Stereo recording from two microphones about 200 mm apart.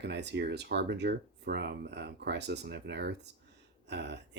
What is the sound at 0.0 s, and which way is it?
Speech, 60° right (ahead or behind).